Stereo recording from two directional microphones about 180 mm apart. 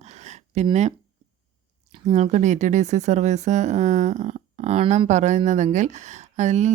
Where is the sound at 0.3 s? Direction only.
40° right (ahead or behind).